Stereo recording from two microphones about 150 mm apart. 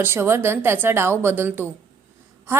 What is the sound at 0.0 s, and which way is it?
A woman's voice, 15° right (ahead or behind).